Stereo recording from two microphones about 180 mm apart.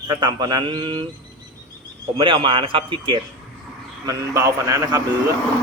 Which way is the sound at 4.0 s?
20° right (ahead or behind).